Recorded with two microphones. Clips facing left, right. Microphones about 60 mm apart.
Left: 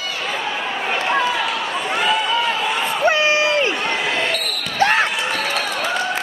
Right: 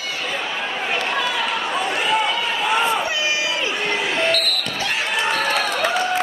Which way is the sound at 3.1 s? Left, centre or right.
Left.